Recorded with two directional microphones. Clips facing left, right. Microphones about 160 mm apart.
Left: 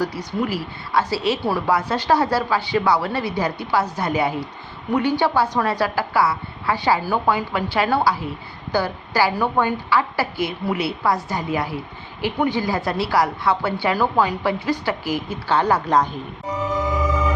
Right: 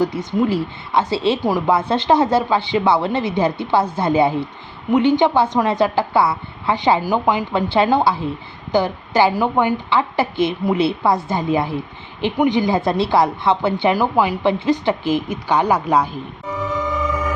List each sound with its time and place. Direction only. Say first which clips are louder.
0.0 s a woman's voice: right 5 dB; 20° right (ahead or behind)
1.5 s a woman's voice: right 4 dB; 15° right (ahead or behind)
1.7 s a woman's voice: right 3 dB; 25° right (ahead or behind)
7.5 s a woman's voice: right 4 dB; 25° right (ahead or behind)